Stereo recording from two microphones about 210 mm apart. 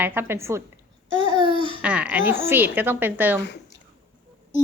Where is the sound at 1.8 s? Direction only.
5° right (ahead or behind).